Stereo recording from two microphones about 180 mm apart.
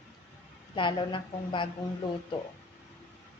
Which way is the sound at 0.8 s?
25° left (ahead or behind).